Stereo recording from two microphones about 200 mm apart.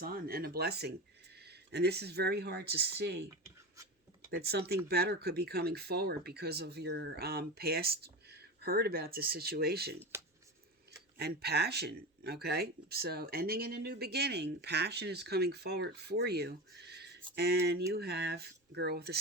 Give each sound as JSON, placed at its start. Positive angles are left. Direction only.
{"t": 0.0, "sound": "speech", "side_deg": -50}
{"t": 4.3, "sound": "speech", "side_deg": -55}
{"t": 10.0, "sound": "speech", "side_deg": -10}
{"t": 11.2, "sound": "speech", "side_deg": -55}